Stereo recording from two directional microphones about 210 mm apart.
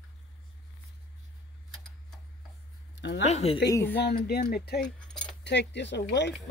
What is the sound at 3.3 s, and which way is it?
Speech, 30° left (ahead or behind).